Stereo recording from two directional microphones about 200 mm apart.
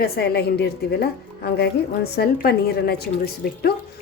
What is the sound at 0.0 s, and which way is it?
Speech, 55° left (ahead or behind).